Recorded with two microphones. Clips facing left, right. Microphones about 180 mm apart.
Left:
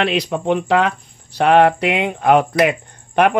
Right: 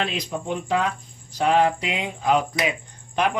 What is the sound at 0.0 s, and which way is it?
Speech, 75° left (ahead or behind).